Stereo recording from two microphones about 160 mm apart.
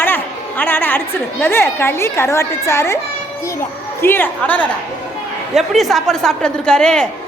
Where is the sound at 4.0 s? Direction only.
15° left (ahead or behind).